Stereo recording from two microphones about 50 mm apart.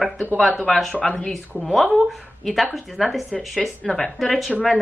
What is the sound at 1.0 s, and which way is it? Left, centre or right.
Speech, centre.